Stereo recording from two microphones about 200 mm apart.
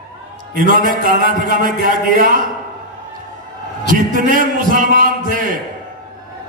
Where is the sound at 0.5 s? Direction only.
45° right (ahead or behind).